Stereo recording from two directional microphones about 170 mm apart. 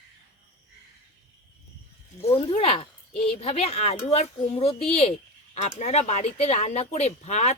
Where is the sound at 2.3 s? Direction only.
35° left (ahead or behind).